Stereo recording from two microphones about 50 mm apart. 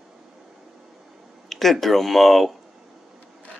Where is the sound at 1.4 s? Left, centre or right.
Centre.